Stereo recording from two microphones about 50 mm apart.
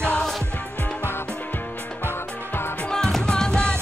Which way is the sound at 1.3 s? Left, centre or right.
Left.